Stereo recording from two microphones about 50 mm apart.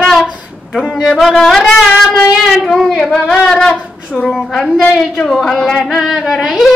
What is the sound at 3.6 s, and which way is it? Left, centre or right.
Speech, centre.